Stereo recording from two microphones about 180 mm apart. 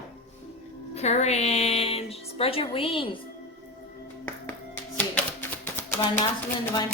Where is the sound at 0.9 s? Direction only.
40° left (ahead or behind).